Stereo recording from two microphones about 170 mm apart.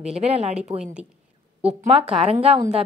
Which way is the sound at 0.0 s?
40° right (ahead or behind).